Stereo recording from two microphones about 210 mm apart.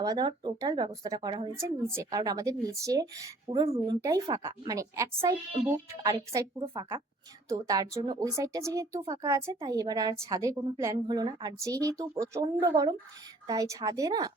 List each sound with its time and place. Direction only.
0.0 s a woman's voice: 20° right (ahead or behind)